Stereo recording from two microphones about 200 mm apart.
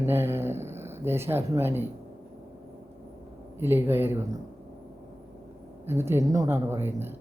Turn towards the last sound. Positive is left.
turn(degrees=-10)  # may be behind; listen again after turning